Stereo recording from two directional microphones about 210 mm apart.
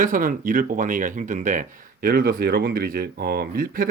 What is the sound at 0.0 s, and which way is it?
Speech, 40° right (ahead or behind).